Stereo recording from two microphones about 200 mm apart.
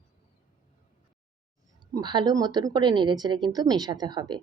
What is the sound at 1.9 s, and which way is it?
A woman's voice, 20° right (ahead or behind).